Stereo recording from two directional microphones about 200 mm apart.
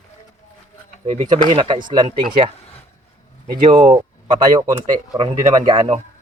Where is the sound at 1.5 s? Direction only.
25° right (ahead or behind).